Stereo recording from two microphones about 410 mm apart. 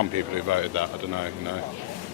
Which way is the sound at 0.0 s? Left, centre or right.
Right.